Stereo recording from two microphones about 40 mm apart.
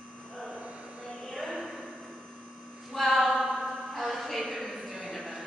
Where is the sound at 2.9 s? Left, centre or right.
Centre.